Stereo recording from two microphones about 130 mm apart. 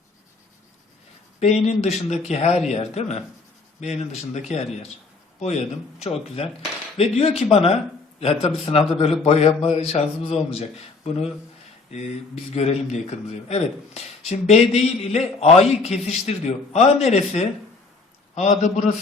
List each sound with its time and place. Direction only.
1.4 s a man's voice: 55° left (ahead or behind)